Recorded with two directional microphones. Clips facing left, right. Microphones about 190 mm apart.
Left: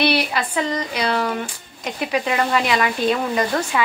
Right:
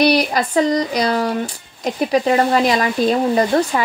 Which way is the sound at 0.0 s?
40° right (ahead or behind).